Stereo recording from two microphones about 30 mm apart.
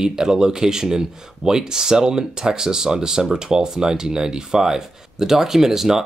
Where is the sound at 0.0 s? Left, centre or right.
Right.